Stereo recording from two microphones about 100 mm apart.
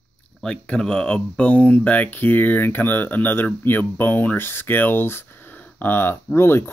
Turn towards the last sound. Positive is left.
turn(degrees=25)  # may be behind; listen again after turning